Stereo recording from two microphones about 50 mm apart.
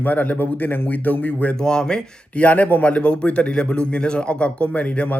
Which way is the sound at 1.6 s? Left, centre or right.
Centre.